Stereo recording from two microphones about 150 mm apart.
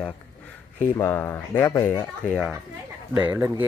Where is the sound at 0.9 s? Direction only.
15° left (ahead or behind).